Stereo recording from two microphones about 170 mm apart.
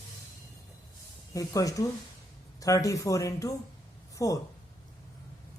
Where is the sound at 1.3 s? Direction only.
20° left (ahead or behind).